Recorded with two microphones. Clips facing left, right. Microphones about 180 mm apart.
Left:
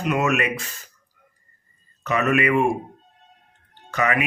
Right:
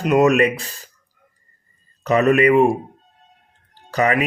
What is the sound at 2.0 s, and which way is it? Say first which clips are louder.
Speech: right 6 dB; 35° right (ahead or behind).